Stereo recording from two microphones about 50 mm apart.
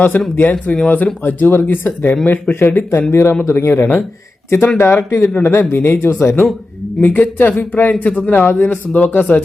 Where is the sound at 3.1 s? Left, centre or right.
Left.